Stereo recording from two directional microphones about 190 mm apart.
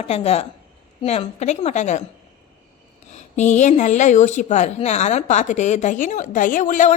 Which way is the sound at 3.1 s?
35° left (ahead or behind).